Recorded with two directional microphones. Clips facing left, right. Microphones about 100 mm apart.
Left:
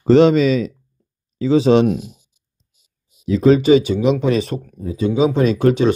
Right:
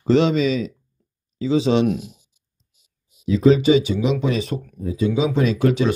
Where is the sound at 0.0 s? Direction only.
50° left (ahead or behind).